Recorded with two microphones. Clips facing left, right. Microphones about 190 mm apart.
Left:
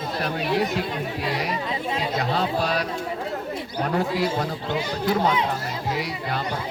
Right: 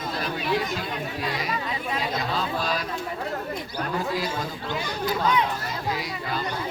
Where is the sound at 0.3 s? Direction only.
65° left (ahead or behind).